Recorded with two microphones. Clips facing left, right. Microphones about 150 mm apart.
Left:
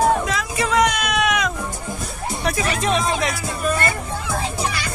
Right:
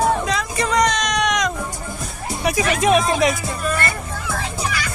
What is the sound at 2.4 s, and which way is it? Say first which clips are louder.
Music: right 3 dB; 10° right (ahead or behind).